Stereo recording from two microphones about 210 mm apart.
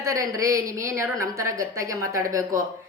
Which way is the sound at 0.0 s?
15° right (ahead or behind).